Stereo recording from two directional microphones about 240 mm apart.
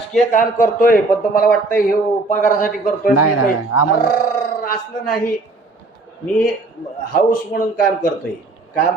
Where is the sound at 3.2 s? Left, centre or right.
Left.